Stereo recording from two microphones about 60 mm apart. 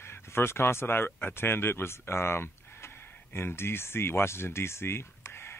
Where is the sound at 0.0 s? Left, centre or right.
Left.